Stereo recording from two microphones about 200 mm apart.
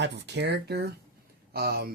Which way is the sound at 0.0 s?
60° right (ahead or behind).